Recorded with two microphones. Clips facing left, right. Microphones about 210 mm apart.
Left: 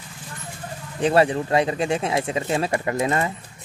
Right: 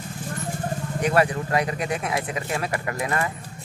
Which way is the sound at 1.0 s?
25° left (ahead or behind).